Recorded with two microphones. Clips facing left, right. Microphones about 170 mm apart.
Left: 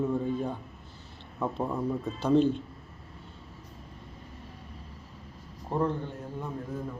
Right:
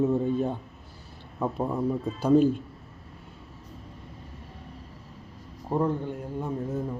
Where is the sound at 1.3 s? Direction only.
10° right (ahead or behind).